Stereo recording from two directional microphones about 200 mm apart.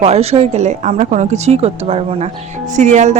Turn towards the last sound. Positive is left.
turn(degrees=-35)  # may be behind; listen again after turning